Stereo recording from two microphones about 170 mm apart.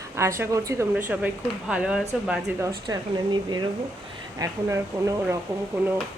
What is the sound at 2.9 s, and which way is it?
Speech, 25° right (ahead or behind).